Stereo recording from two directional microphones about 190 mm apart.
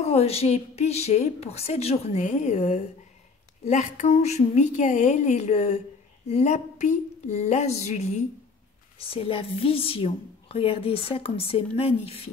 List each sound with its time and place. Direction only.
0.0 s a woman's voice: 35° left (ahead or behind)